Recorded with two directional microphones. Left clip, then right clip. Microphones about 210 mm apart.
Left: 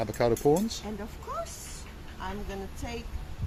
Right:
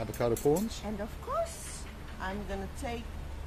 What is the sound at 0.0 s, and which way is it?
Speech, 35° left (ahead or behind).